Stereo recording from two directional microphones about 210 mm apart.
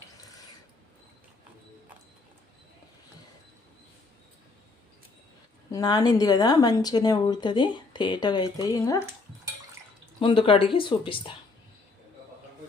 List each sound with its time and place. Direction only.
5.7 s speech: 20° left (ahead or behind)
10.2 s speech: 25° left (ahead or behind)